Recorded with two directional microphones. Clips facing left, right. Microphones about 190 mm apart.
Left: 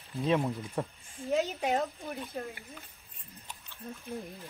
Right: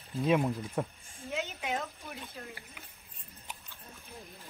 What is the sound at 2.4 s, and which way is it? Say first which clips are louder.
Speech: left 11 dB; 50° left (ahead or behind).